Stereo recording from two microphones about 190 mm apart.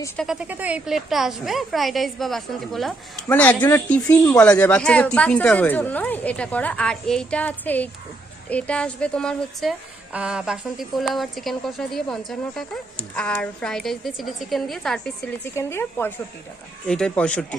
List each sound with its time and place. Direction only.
0.2 s a woman's voice: 5° right (ahead or behind)